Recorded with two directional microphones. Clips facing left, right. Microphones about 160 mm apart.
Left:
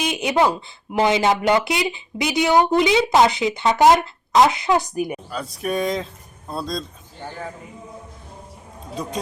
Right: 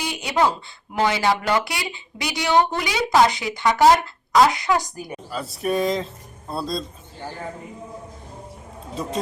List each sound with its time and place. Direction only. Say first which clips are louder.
0.0 s a sound: left 2 dB; 20° left (ahead or behind)
0.9 s speech: left 3 dB; 20° left (ahead or behind)
5.3 s speech: right 1 dB; centre (ahead or behind)